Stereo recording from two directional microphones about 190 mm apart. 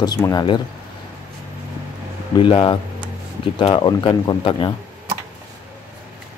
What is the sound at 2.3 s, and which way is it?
Speech, 25° left (ahead or behind).